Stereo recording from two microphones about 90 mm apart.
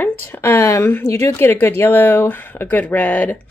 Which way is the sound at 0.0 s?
25° left (ahead or behind).